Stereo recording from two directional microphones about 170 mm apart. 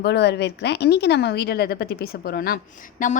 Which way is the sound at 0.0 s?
80° left.